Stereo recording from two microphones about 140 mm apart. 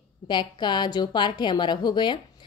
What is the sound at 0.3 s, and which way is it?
A woman's voice, 30° left (ahead or behind).